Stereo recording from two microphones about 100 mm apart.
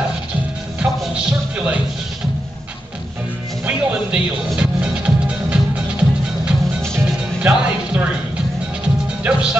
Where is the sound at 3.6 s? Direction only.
15° right (ahead or behind).